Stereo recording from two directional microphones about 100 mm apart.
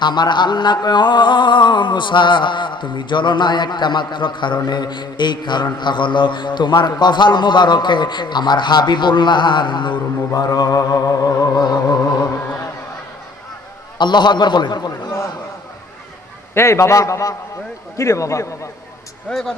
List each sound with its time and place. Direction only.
0.0 s mantra: 50° left (ahead or behind)
14.0 s mantra: 50° left (ahead or behind)
16.6 s a man's voice: 25° left (ahead or behind)
19.3 s speech: 5° left (ahead or behind)